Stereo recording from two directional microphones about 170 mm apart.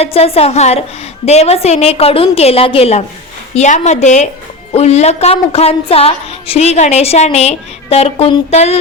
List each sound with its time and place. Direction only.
0.0 s a woman's voice: 35° left (ahead or behind)